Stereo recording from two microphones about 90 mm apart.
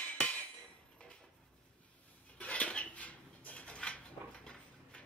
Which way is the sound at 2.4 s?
15° left (ahead or behind).